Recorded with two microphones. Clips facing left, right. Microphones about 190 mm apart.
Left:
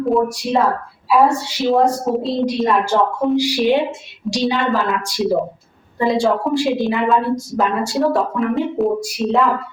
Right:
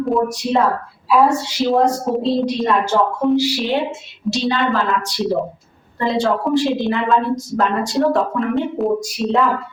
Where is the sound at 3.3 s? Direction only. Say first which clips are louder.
Left 2 dB; 15° left (ahead or behind).